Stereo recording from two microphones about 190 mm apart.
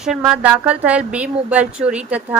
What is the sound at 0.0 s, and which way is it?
A woman's voice, 5° right (ahead or behind).